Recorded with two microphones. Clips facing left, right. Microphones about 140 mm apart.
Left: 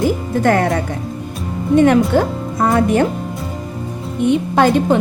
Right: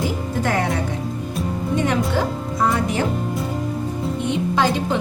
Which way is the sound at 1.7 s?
55° left (ahead or behind).